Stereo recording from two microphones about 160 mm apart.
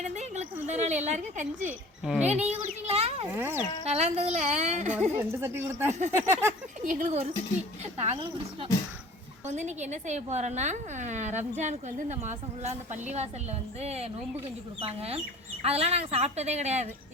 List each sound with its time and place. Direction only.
0.0 s a woman's voice: 45° right (ahead or behind)
1.6 s speech: 10° right (ahead or behind)
2.2 s a woman's voice: 45° right (ahead or behind)
3.2 s speech: 15° right (ahead or behind)
3.8 s a woman's voice: 40° right (ahead or behind)
5.1 s speech: 15° right (ahead or behind)
6.8 s a woman's voice: 50° right (ahead or behind)
7.9 s a woman's voice: 35° right (ahead or behind)
9.5 s a woman's voice: 45° right (ahead or behind)